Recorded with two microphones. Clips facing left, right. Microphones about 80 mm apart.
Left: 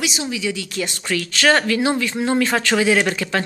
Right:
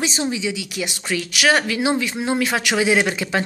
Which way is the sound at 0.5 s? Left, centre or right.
Centre.